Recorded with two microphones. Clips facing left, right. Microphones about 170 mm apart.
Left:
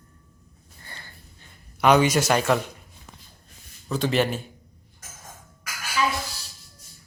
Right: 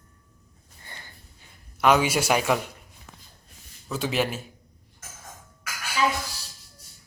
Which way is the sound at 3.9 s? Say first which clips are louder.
Left 3 dB; 5° right (ahead or behind).